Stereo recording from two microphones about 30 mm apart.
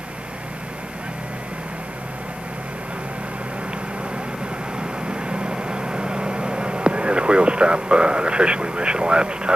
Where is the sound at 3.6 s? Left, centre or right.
Right.